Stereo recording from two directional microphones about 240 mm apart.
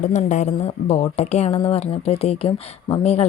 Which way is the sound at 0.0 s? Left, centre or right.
Left.